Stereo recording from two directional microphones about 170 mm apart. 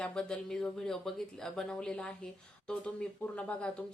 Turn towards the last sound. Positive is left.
turn(degrees=5)  # may be behind; listen again after turning